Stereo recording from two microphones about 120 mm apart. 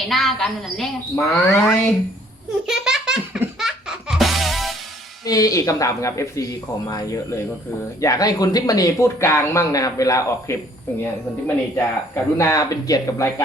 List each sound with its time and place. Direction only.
0.1 s a woman's voice: centre (ahead or behind)
2.6 s a sound: 5° right (ahead or behind)
3.6 s music: 5° right (ahead or behind)
5.2 s speech: 30° left (ahead or behind)
11.0 s speech: 15° left (ahead or behind)